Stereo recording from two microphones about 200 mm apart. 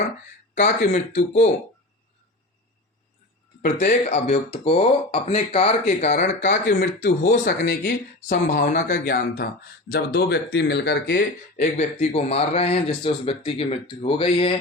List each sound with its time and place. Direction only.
0.5 s speech: 35° left (ahead or behind)
3.6 s speech: 35° left (ahead or behind); by 11.2 s 55° left (ahead or behind)
11.5 s speech: 35° left (ahead or behind)